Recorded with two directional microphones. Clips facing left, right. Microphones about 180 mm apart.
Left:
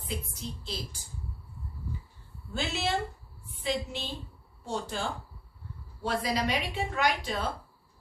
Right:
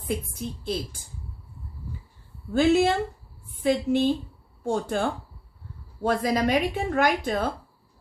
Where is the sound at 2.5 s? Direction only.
50° right (ahead or behind).